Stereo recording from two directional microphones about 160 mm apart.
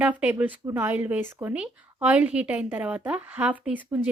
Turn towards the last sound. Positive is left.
turn(degrees=-10)  # may be behind; listen again after turning